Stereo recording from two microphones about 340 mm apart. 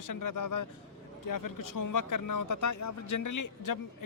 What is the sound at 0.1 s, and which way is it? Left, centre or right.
Speech, left.